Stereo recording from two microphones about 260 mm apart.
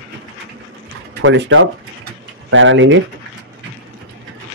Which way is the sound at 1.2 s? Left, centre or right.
Right.